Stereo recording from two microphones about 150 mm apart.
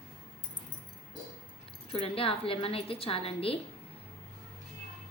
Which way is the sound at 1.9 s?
40° left (ahead or behind).